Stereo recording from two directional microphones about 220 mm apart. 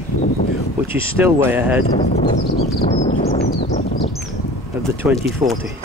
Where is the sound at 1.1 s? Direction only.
10° right (ahead or behind).